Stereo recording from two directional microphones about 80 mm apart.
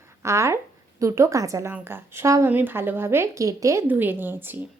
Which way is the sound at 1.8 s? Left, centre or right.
Right.